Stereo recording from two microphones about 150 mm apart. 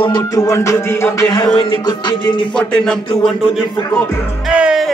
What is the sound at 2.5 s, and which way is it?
Music, 5° left (ahead or behind).